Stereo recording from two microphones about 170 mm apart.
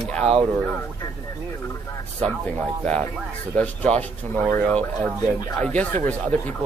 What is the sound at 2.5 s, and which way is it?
Speech, 5° left (ahead or behind).